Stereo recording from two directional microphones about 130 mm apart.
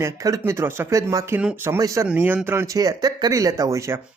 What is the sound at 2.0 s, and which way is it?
Speech, 10° right (ahead or behind).